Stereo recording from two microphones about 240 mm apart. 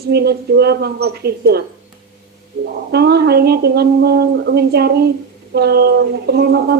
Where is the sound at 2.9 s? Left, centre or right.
Right.